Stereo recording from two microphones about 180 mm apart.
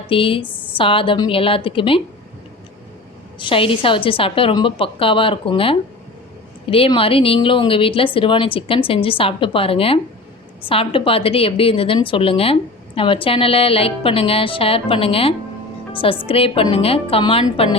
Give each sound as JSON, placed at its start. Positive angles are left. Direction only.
{"t": 0.1, "sound": "a woman's voice", "side_deg": 30}
{"t": 0.4, "sound": "a woman's voice", "side_deg": 10}
{"t": 0.8, "sound": "a woman's voice", "side_deg": 30}
{"t": 3.3, "sound": "a woman's voice", "side_deg": 30}